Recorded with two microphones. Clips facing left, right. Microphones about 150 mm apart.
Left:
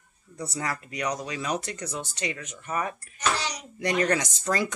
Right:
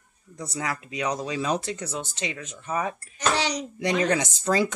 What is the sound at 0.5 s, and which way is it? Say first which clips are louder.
Speech: right 2 dB; 20° right (ahead or behind).